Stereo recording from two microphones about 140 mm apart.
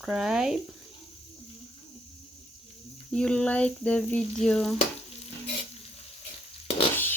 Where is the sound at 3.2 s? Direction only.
5° left (ahead or behind).